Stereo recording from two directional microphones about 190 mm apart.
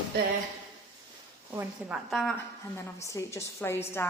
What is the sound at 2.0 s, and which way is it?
Speech, centre (ahead or behind).